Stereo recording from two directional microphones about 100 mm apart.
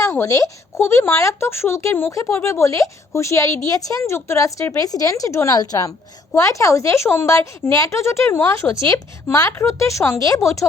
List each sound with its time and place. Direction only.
0.0 s speech: 30° left (ahead or behind)